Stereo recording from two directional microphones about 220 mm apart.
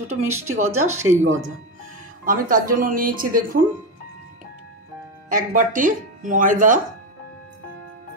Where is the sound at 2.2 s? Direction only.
40° right (ahead or behind).